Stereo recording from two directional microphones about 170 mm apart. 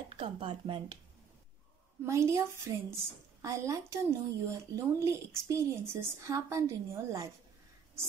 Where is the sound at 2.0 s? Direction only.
15° right (ahead or behind).